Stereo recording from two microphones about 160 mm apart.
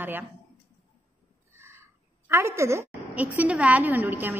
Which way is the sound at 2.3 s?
15° right (ahead or behind).